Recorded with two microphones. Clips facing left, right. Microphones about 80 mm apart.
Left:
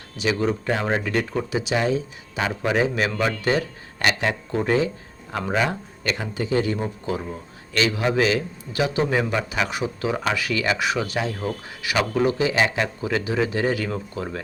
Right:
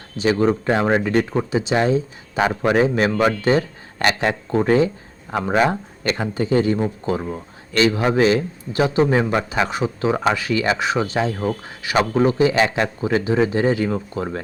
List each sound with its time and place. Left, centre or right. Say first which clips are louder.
0.2 s a man's voice: right 5 dB; right
5.3 s speech: right 4 dB; right
5.5 s a man's voice: right 6 dB; right